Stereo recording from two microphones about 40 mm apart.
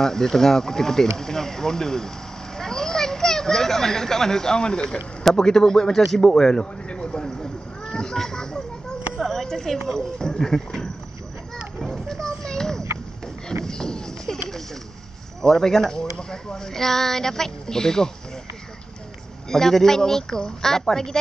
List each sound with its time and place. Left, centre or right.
0.0 s speech: centre
2.5 s children playing: centre
5.2 s a man's voice: centre
7.2 s a sound: centre
9.9 s speech: centre
11.8 s a sound: centre
15.4 s speech: centre
19.5 s speech: centre